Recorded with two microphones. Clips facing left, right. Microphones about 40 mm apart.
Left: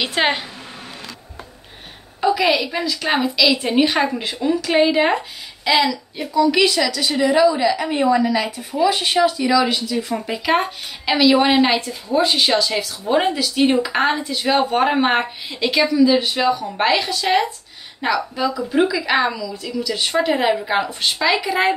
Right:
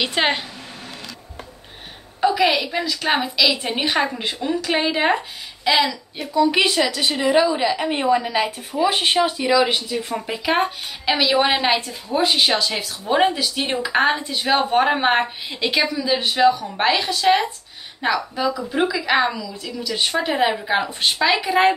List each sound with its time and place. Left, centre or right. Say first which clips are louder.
0.0 s a woman's voice: left 1 dB; centre
2.1 s a woman's voice: left 1 dB; centre
6.3 s a woman's voice: left 1 dB; right
10.1 s a woman's voice: left 1 dB; centre